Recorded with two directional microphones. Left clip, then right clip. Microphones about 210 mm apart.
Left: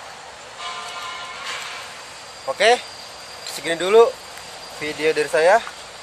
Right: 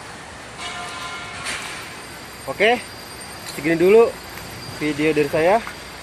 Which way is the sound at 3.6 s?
15° left (ahead or behind).